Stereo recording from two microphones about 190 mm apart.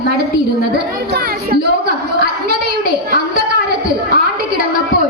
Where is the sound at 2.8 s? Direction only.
55° right (ahead or behind).